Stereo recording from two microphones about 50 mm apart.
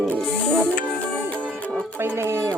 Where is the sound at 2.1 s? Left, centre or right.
Right.